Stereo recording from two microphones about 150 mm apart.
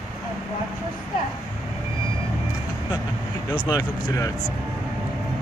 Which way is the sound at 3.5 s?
30° left (ahead or behind).